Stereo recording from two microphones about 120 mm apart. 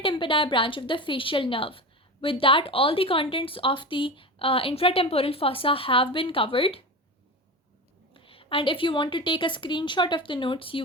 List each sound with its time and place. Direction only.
0.0 s a woman's voice: 45° left (ahead or behind)
8.1 s a woman's voice: 50° left (ahead or behind)